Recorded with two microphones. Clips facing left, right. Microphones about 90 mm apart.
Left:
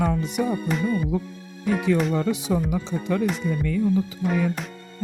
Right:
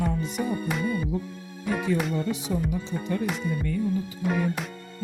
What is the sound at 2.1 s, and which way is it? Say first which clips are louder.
Speech: left 4 dB; 90° left.